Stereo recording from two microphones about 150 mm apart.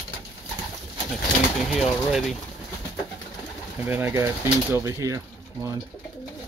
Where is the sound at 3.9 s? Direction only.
15° right (ahead or behind).